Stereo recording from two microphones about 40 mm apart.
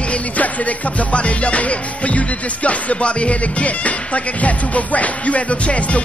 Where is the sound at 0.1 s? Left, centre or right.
Left.